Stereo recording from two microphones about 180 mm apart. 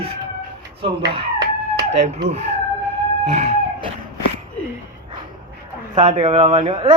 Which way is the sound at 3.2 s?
40° right (ahead or behind).